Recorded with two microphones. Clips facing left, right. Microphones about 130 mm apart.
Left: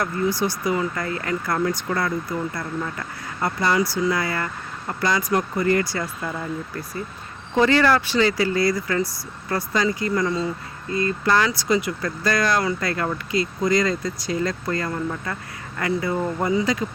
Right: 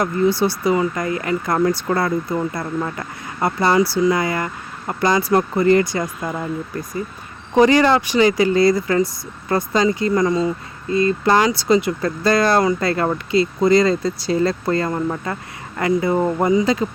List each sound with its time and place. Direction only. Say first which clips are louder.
0.0 s speech: right 5 dB; 25° right (ahead or behind)
1.5 s speech: right 6 dB; 40° right (ahead or behind)
3.4 s speech: right 5 dB; 25° right (ahead or behind)
7.5 s speech: right 4 dB; 15° right (ahead or behind)